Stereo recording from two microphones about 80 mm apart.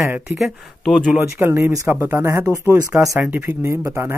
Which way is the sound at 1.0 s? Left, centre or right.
Right.